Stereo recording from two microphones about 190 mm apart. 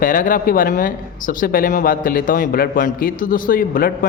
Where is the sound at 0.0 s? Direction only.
45° left (ahead or behind).